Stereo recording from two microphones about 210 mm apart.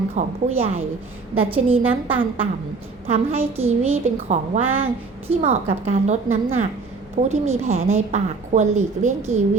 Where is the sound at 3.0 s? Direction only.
30° right (ahead or behind).